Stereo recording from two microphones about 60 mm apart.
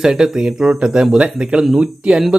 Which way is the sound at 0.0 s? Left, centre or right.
Centre.